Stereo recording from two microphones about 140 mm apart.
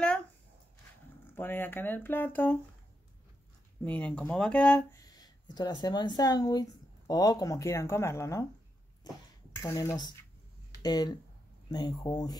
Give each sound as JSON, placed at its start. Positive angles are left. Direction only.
{"t": 0.0, "sound": "a sound", "side_deg": 10}
{"t": 1.3, "sound": "speech", "side_deg": 15}
{"t": 3.8, "sound": "speech", "side_deg": 10}
{"t": 4.9, "sound": "speech", "side_deg": 25}
{"t": 9.6, "sound": "speech", "side_deg": 20}